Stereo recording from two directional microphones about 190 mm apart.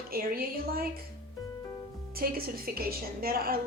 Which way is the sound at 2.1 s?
50° right (ahead or behind).